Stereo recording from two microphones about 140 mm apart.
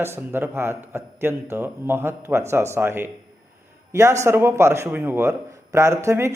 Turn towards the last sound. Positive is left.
turn(degrees=-20)  # may be behind; listen again after turning